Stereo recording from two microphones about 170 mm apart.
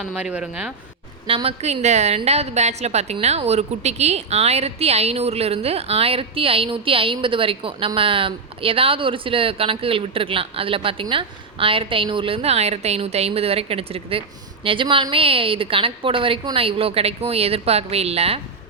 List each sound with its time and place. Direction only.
0.0 s speech: 5° right (ahead or behind)
1.3 s a woman's voice: 35° right (ahead or behind)